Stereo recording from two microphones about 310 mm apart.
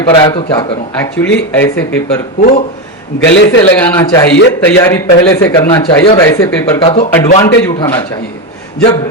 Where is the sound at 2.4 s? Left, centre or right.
Left.